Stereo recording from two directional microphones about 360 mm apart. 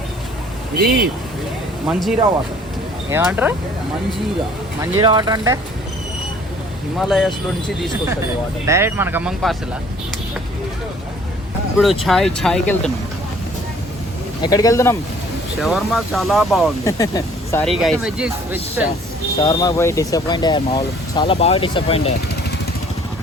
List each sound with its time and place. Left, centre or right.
0.8 s speech: right
3.1 s speech: centre
4.8 s speech: centre
7.0 s speech: centre
8.6 s speech: centre
11.8 s speech: centre
14.4 s speech: centre
19.4 s speech: centre